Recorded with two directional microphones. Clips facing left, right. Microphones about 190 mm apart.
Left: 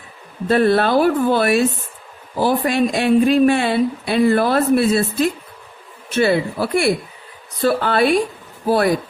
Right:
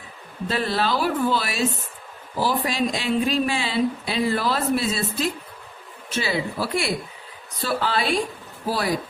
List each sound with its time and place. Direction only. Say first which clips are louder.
0.4 s speech: left 9 dB; 55° left (ahead or behind)